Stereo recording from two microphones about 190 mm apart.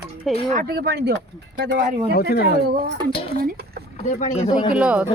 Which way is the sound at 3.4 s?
55° right (ahead or behind).